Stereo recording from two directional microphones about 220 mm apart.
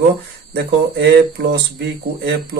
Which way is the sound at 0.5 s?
50° right (ahead or behind).